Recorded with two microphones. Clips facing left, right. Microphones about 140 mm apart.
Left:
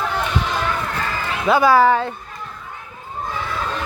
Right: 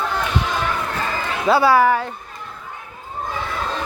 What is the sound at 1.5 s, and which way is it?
Speech, 30° right (ahead or behind).